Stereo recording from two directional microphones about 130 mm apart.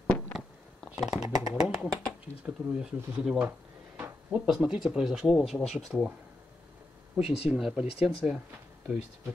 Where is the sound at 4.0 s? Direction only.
20° right (ahead or behind).